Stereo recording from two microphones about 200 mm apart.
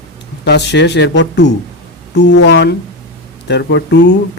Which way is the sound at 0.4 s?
60° left (ahead or behind).